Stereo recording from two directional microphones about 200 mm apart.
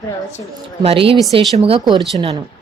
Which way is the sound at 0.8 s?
30° right (ahead or behind).